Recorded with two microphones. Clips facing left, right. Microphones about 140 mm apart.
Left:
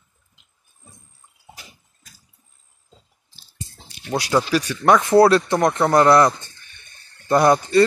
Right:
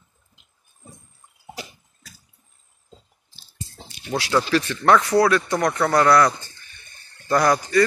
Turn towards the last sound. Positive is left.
turn(degrees=25)  # may be behind; listen again after turning